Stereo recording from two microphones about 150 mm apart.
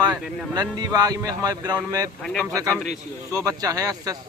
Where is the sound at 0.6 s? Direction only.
25° right (ahead or behind).